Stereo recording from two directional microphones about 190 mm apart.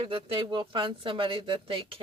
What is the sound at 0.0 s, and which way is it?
Speech, 25° right (ahead or behind).